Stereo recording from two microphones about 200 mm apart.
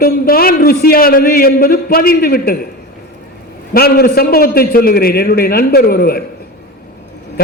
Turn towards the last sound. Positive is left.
turn(degrees=50)  # may be behind; listen again after turning